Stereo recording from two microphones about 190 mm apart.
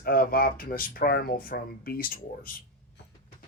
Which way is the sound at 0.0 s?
50° left (ahead or behind).